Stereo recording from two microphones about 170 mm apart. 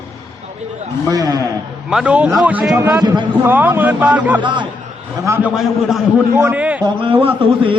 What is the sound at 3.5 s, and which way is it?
Speech, 10° right (ahead or behind).